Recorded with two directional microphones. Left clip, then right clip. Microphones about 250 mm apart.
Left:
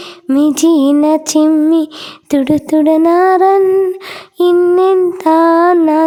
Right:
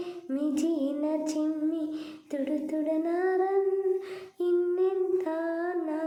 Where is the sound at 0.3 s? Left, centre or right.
Left.